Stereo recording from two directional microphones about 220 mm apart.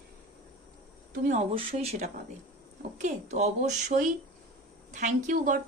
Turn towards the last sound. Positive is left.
turn(degrees=-35)  # may be behind; listen again after turning